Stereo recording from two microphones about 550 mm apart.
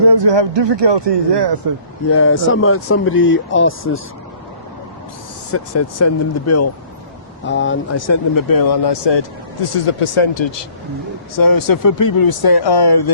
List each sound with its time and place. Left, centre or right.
0.0 s speech: right
2.0 s speech: left
5.5 s speech: left
9.7 s speech: left
11.3 s speech: left